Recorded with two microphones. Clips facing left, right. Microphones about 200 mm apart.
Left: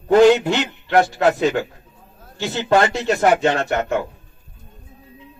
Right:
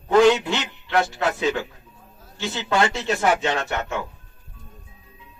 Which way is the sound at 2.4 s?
45° left (ahead or behind).